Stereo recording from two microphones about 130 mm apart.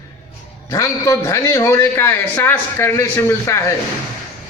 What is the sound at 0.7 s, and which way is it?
A man's voice, 25° left (ahead or behind).